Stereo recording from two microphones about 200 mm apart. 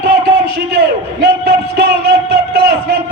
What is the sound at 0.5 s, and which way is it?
A man's voice, 50° right (ahead or behind).